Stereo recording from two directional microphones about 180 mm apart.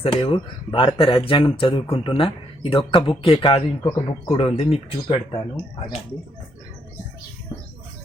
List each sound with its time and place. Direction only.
0.0 s speech: 30° left (ahead or behind)